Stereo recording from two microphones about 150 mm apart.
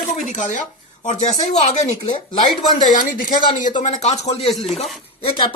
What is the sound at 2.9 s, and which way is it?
Speech, 65° left (ahead or behind).